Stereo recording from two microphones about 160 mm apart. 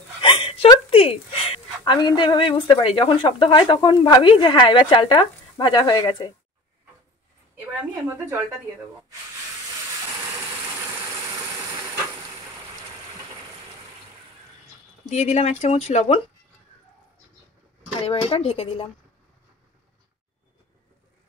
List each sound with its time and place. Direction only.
0.2 s a woman's voice: 35° left (ahead or behind)
15.0 s speech: 45° left (ahead or behind)
18.0 s speech: 35° left (ahead or behind)